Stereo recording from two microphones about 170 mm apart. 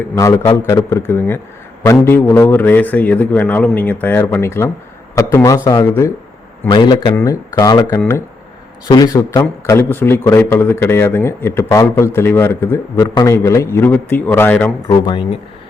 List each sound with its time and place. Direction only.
0.2 s a man's voice: 20° left (ahead or behind)
6.7 s a man's voice: 25° left (ahead or behind); by 14.7 s 10° left (ahead or behind)
14.8 s speech: 25° left (ahead or behind)